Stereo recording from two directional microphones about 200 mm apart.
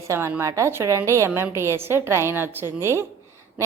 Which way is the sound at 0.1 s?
15° right (ahead or behind).